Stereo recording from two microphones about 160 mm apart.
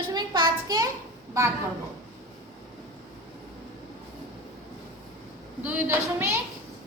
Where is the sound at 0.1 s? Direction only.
30° right (ahead or behind).